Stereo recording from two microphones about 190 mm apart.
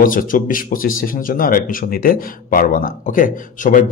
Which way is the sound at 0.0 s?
45° left (ahead or behind).